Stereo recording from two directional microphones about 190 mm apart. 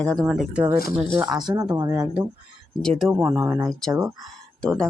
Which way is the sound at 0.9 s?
15° right (ahead or behind).